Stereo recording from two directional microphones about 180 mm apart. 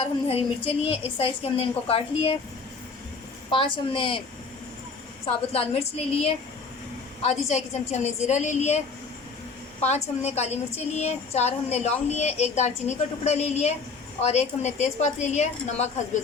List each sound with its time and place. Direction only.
0.3 s a woman's voice: 35° left (ahead or behind)
3.5 s a woman's voice: 30° left (ahead or behind)
5.2 s a woman's voice: 35° left (ahead or behind)
9.8 s a woman's voice: 35° left (ahead or behind)